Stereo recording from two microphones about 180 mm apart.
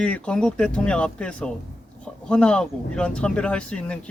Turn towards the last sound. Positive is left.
turn(degrees=5)  # may be behind; listen again after turning